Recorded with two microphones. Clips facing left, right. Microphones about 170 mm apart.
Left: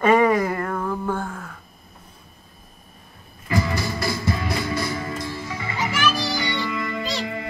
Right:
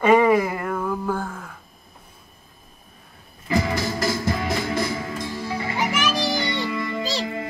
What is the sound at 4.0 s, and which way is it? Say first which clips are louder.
Music: right 1 dB; 45° right (ahead or behind).